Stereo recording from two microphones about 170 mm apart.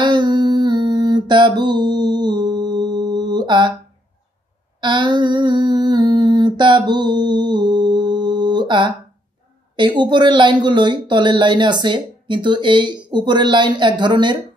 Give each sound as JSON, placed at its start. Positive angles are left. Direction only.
{"t": 0.0, "sound": "a sound", "side_deg": -25}
{"t": 4.7, "sound": "humming", "side_deg": -25}
{"t": 9.8, "sound": "speech", "side_deg": -25}